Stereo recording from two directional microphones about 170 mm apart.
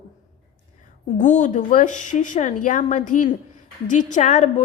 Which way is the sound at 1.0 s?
45° left (ahead or behind).